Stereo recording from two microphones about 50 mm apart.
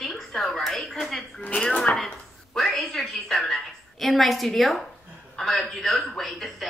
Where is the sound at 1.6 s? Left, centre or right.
Centre.